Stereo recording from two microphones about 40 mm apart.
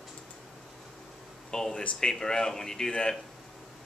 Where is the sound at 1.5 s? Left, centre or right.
Centre.